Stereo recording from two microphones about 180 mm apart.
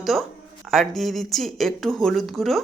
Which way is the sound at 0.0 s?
Centre (ahead or behind).